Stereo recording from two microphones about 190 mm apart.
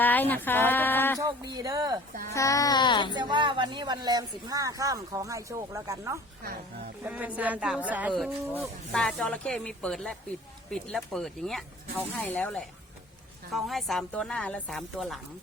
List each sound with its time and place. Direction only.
0.0 s speech: 10° left (ahead or behind)
1.2 s a woman's voice: 20° right (ahead or behind)
2.3 s speech: 15° left (ahead or behind)
3.2 s speech: 25° right (ahead or behind)
6.4 s speech: 50° right (ahead or behind)
7.0 s a woman's voice: 5° right (ahead or behind)
8.1 s speech: centre (ahead or behind)